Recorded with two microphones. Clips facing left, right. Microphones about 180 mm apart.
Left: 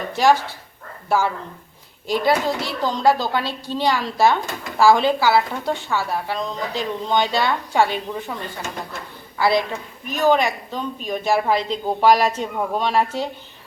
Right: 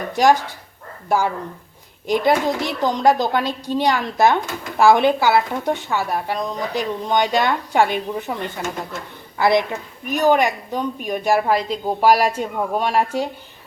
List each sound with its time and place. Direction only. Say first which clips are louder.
0.1 s speech: right 1 dB; 15° right (ahead or behind)